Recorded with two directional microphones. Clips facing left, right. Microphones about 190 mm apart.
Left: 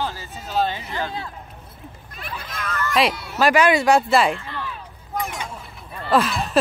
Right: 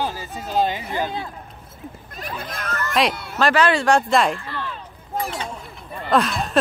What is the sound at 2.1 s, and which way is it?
Speech, 45° right (ahead or behind).